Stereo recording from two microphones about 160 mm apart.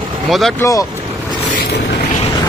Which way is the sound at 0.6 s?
20° left (ahead or behind).